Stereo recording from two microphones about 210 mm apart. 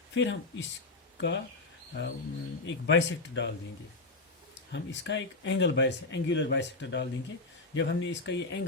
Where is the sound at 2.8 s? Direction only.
55° left (ahead or behind).